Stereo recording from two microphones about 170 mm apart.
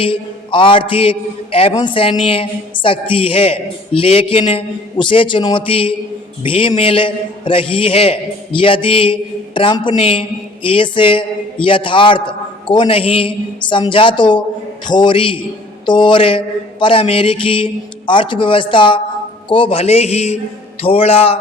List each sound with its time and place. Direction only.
0.0 s a man's voice: 30° left (ahead or behind)